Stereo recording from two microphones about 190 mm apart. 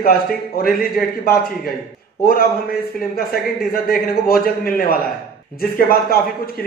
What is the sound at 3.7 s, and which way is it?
A man's voice, 50° left (ahead or behind).